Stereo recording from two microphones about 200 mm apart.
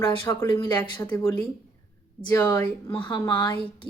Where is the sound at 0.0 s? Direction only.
20° left (ahead or behind).